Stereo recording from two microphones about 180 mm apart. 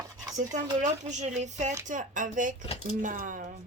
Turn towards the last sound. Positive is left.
turn(degrees=-45)  # may be behind; listen again after turning